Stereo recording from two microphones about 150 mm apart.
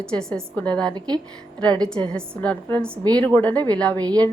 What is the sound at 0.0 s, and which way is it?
Speech, 5° left (ahead or behind).